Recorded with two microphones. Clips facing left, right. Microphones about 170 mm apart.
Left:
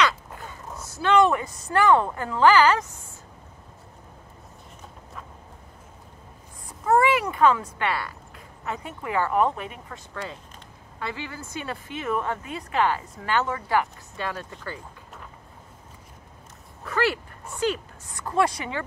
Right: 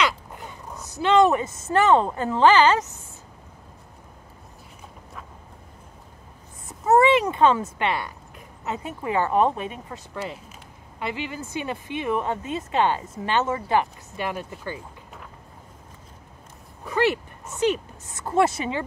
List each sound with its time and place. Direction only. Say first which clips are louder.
0.0 s crow: left 1 dB; 20° right (ahead or behind)
0.7 s speech: right 2 dB; 20° right (ahead or behind)
6.8 s speech: right 3 dB; 25° right (ahead or behind)
11.0 s speech: right 3 dB; 20° right (ahead or behind)
16.8 s speech: right 3 dB; 20° right (ahead or behind)